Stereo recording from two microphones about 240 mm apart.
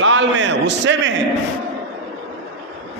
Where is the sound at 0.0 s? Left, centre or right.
Right.